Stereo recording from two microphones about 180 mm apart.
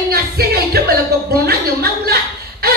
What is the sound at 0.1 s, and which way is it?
Music, 60° right (ahead or behind).